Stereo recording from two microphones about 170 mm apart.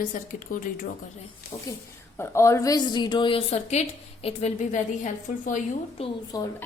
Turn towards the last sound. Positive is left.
turn(degrees=20)  # may be behind; listen again after turning